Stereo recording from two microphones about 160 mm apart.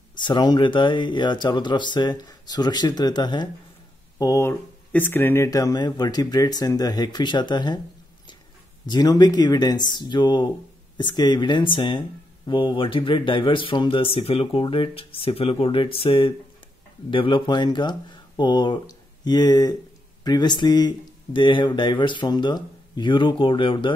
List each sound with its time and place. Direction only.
0.2 s speech: 25° left (ahead or behind)
8.8 s speech: 25° left (ahead or behind)